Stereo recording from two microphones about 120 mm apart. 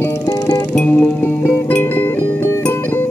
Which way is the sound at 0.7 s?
10° left (ahead or behind).